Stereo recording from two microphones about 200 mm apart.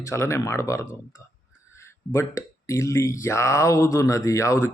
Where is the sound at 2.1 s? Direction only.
15° left (ahead or behind).